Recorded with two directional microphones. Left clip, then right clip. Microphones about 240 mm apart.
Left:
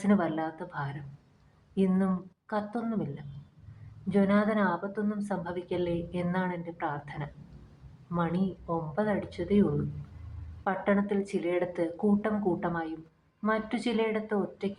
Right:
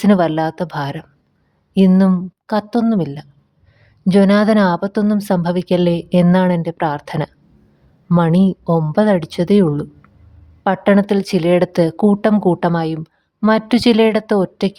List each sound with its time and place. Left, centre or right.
0.0 s a woman's voice: right